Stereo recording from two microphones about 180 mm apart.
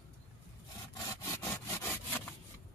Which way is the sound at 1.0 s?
15° left (ahead or behind).